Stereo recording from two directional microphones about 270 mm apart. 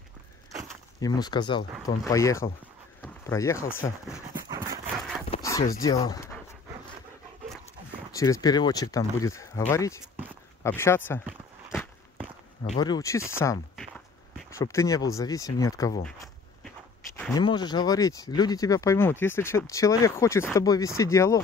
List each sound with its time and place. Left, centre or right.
0.9 s speech: centre
5.3 s a sound: centre
8.1 s speech: centre
12.6 s speech: centre
17.2 s speech: centre